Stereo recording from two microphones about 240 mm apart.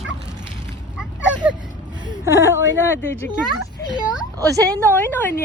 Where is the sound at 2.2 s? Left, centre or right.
Centre.